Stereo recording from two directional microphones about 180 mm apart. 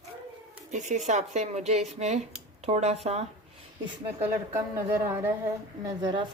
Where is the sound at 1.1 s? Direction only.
40° right (ahead or behind).